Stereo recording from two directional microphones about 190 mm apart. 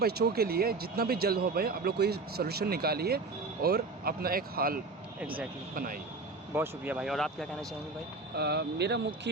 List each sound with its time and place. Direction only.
0.0 s speech: 55° right (ahead or behind)
5.2 s speech: 10° right (ahead or behind)
5.7 s speech: 45° right (ahead or behind)
6.5 s speech: 10° right (ahead or behind)
8.4 s speech: 60° right (ahead or behind)